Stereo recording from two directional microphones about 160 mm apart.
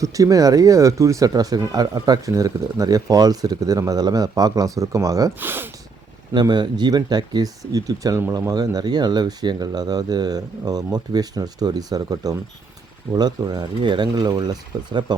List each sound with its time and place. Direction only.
0.0 s speech: 20° right (ahead or behind)
6.3 s speech: 25° right (ahead or behind)